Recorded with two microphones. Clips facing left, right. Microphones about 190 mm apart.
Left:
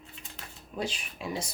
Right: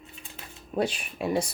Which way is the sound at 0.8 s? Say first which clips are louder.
Right 7 dB; 60° right (ahead or behind).